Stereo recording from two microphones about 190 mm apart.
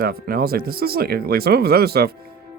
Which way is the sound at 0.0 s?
50° right (ahead or behind).